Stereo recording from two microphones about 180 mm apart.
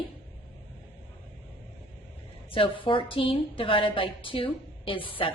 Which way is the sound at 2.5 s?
30° left (ahead or behind).